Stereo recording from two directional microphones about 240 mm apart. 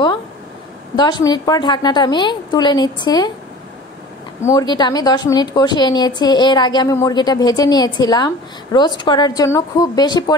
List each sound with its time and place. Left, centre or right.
0.9 s a woman's voice: centre
4.4 s a woman's voice: centre